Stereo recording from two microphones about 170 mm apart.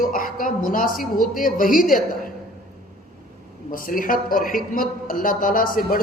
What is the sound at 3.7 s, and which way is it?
A man's voice, 55° left (ahead or behind).